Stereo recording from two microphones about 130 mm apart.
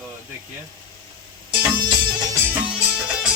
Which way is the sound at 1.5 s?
35° right (ahead or behind).